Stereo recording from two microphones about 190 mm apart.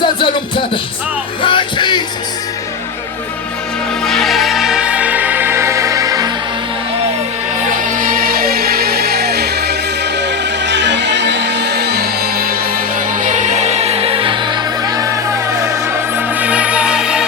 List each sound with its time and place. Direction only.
1.4 s music: 25° left (ahead or behind)
4.0 s music: centre (ahead or behind); by 6.3 s 20° right (ahead or behind)
7.8 s music: 45° right (ahead or behind); by 14.6 s 25° right (ahead or behind)
16.3 s music: 10° right (ahead or behind)